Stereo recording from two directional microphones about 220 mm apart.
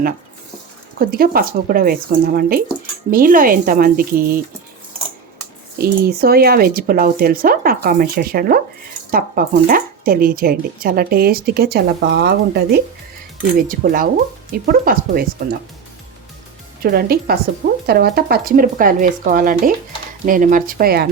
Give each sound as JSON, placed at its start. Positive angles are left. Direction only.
{"t": 0.9, "sound": "speech", "side_deg": -40}
{"t": 5.7, "sound": "speech", "side_deg": -45}
{"t": 16.8, "sound": "speech", "side_deg": -45}